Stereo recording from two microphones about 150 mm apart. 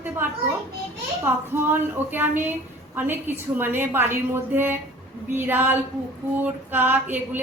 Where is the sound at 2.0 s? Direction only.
15° right (ahead or behind).